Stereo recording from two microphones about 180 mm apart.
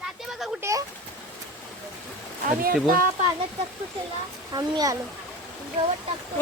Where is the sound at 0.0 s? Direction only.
Centre (ahead or behind).